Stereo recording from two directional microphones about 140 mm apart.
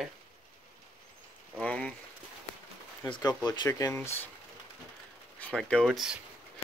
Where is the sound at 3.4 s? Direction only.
25° left (ahead or behind).